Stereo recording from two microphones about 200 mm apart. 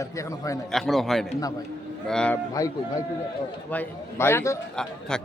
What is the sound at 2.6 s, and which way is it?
A man's voice, 15° left (ahead or behind).